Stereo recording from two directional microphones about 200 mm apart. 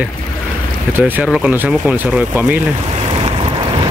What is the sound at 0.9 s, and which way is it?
Speech, 10° right (ahead or behind).